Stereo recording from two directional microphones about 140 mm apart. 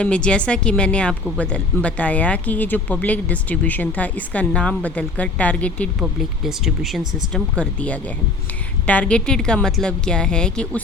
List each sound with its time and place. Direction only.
0.0 s speech: 5° left (ahead or behind)
6.0 s speech: 5° right (ahead or behind)